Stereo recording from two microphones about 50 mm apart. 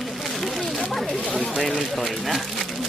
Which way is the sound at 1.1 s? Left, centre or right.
Centre.